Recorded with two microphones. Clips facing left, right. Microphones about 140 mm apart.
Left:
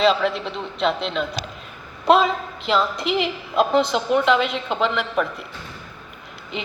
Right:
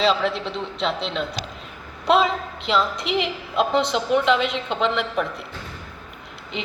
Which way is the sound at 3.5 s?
45° left (ahead or behind).